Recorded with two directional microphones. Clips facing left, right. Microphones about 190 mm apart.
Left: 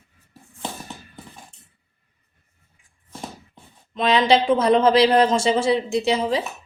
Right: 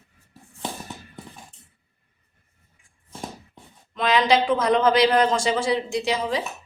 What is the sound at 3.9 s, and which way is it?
A man's voice, 25° left (ahead or behind).